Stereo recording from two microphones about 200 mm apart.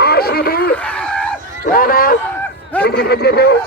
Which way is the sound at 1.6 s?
45° left (ahead or behind).